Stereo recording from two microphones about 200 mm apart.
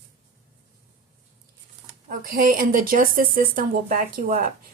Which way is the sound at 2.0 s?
45° right (ahead or behind).